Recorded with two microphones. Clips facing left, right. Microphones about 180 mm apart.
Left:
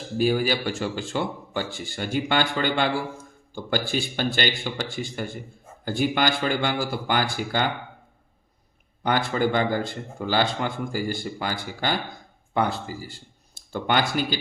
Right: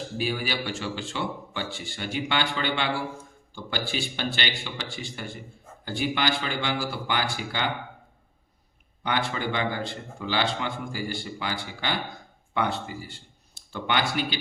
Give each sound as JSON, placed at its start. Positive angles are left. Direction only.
{"t": 0.2, "sound": "a man's voice", "side_deg": 45}
{"t": 5.8, "sound": "a man's voice", "side_deg": 45}
{"t": 9.0, "sound": "a man's voice", "side_deg": 45}